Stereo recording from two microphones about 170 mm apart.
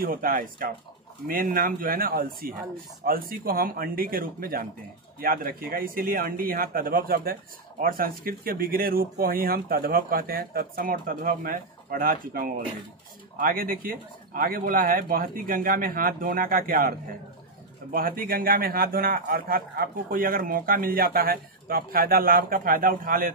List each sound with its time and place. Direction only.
0.0 s a man's voice: 60° right (ahead or behind)
17.9 s a man's voice: 55° right (ahead or behind)